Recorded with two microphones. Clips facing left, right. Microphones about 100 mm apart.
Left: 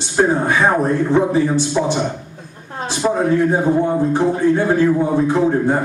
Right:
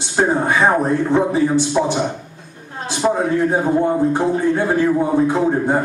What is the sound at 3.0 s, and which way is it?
A man's voice, 15° right (ahead or behind).